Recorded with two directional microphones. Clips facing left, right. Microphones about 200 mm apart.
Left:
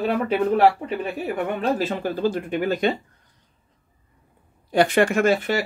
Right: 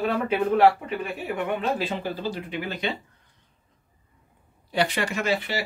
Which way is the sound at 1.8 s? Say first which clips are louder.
Left 6 dB; 50° left (ahead or behind).